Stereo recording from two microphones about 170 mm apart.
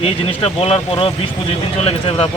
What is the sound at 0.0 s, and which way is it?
A man's voice, 35° left (ahead or behind).